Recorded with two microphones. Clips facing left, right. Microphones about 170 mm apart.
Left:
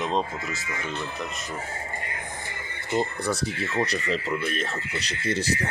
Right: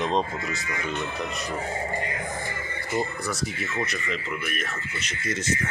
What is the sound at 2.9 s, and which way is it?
Speech, 30° left (ahead or behind).